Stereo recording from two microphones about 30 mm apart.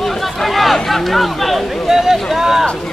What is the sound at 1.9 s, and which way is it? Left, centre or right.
Boat, centre.